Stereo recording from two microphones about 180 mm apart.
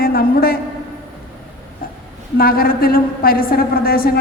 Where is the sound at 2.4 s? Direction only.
55° left (ahead or behind).